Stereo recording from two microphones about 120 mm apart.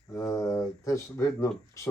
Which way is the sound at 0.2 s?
25° left (ahead or behind).